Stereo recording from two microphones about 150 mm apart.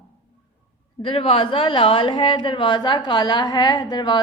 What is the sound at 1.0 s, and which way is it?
A woman's voice, 35° left (ahead or behind).